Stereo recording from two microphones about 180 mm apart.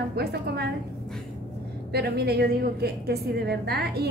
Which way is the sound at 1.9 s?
60° right (ahead or behind).